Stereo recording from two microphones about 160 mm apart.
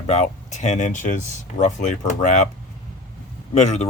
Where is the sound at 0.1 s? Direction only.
45° left (ahead or behind).